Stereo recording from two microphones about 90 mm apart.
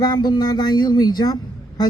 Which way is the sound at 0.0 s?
50° left (ahead or behind).